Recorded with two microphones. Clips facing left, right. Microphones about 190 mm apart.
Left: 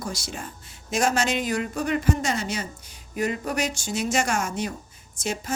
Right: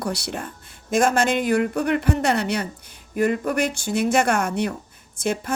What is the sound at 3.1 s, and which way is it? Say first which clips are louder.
Speech: right 5 dB; 55° right (ahead or behind).